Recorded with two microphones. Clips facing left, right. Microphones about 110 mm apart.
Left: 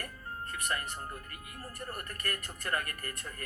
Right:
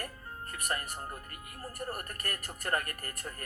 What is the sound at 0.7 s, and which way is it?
Speech, 30° right (ahead or behind).